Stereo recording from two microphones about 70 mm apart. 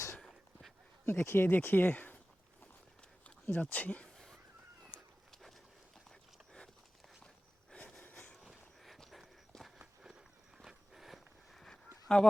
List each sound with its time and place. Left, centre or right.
1.0 s speech: left
3.4 s speech: left
4.1 s a sound: centre
5.3 s dog: centre
6.1 s a sound: centre
7.7 s wheeze: centre
8.1 s vehicle: centre
8.4 s horse: centre
9.5 s walk: centre
10.0 s walk: centre
12.1 s speech: centre